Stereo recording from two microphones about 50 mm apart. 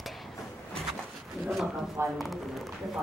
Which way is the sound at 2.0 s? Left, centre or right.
Right.